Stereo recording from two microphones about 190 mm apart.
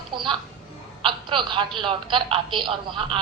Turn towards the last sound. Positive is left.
turn(degrees=-25)  # may be behind; listen again after turning